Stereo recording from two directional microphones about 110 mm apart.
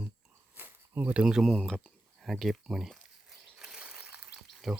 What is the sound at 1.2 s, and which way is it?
Speech, 5° right (ahead or behind).